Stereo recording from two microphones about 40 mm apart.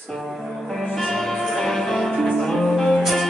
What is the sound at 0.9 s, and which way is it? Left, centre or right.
Music, centre.